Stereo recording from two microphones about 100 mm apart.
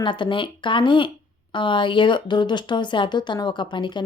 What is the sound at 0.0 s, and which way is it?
A woman's voice, 55° left (ahead or behind).